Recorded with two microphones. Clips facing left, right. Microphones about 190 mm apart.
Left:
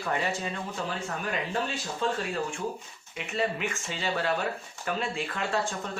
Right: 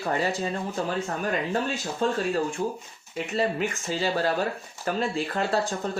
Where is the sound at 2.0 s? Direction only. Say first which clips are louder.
Right 5 dB; 45° right (ahead or behind).